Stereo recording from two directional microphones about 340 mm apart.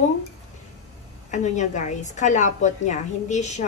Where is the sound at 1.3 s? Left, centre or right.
Left.